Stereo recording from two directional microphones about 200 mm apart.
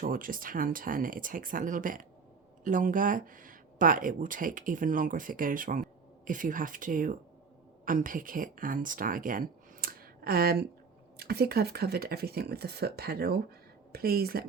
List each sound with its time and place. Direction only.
0.0 s speech: 45° right (ahead or behind)